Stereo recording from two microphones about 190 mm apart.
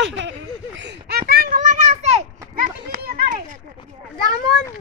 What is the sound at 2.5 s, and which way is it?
Children playing, 50° right (ahead or behind).